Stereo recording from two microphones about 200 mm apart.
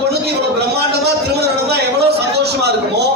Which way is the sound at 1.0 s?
55° right (ahead or behind).